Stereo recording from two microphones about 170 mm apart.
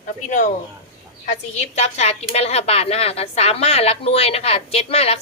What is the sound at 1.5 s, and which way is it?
A woman's voice, 40° left (ahead or behind).